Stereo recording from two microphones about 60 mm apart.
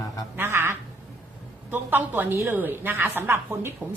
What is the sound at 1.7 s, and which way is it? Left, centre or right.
A woman's voice, right.